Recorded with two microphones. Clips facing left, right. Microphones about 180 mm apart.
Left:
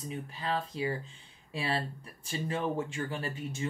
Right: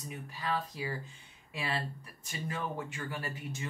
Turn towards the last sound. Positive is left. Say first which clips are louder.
# left 3 dB
turn(degrees=25)  # may be behind; listen again after turning